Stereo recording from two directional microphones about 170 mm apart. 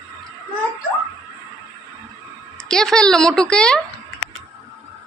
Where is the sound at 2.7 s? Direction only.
5° left (ahead or behind).